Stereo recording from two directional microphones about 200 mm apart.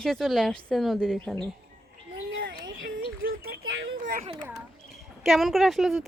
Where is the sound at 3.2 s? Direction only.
45° right (ahead or behind).